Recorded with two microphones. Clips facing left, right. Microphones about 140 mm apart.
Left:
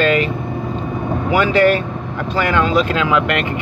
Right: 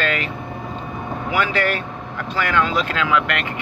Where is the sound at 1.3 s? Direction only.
25° left (ahead or behind).